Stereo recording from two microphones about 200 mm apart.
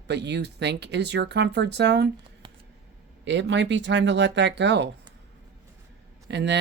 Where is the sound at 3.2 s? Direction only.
65° right (ahead or behind).